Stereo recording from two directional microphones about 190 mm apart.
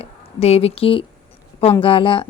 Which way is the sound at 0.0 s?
35° left (ahead or behind).